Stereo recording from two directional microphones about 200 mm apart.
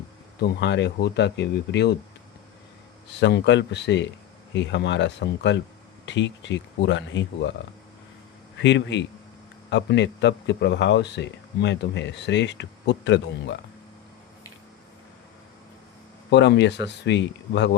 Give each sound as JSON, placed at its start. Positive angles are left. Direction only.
{"t": 0.4, "sound": "a man's voice", "side_deg": 60}
{"t": 3.2, "sound": "a man's voice", "side_deg": 60}
{"t": 8.6, "sound": "a man's voice", "side_deg": 65}
{"t": 16.3, "sound": "a man's voice", "side_deg": 60}